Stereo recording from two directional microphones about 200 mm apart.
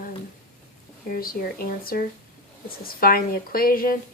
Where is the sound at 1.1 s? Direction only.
45° left (ahead or behind).